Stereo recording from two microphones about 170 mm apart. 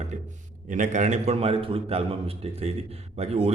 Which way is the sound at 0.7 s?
45° right (ahead or behind).